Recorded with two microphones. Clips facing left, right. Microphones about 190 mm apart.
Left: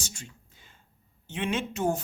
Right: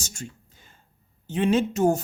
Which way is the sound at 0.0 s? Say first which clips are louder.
Right 6 dB; 45° right (ahead or behind).